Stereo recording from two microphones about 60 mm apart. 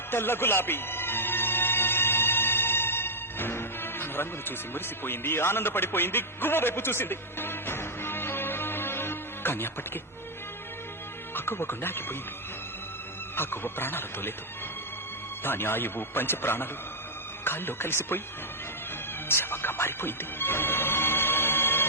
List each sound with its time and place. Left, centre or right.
0.1 s music: left
11.3 s a man's voice: left
13.3 s a man's voice: left
15.4 s a man's voice: left
19.3 s music: left